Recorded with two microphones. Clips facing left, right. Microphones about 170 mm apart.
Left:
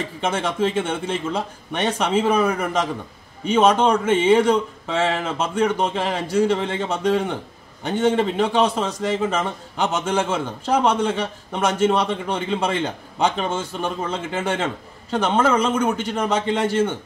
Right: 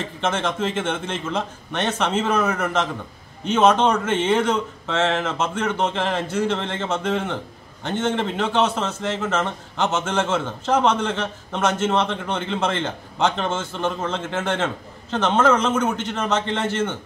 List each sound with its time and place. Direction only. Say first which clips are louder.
0.2 s a man's voice: left 2 dB; 10° left (ahead or behind)